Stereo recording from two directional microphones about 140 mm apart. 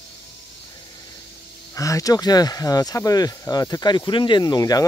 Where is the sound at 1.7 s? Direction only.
25° left (ahead or behind).